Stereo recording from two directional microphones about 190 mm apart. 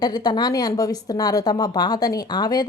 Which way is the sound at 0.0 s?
20° left (ahead or behind).